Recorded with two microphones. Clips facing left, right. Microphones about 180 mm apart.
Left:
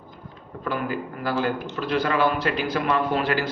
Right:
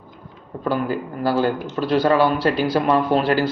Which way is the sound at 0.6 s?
35° right (ahead or behind).